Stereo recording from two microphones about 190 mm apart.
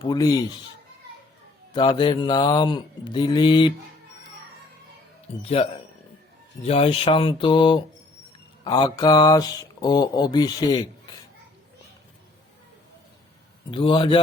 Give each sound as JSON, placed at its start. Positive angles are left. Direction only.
{"t": 0.0, "sound": "speech", "side_deg": 20}
{"t": 1.7, "sound": "speech", "side_deg": 25}
{"t": 5.4, "sound": "speech", "side_deg": 30}
{"t": 13.7, "sound": "speech", "side_deg": 25}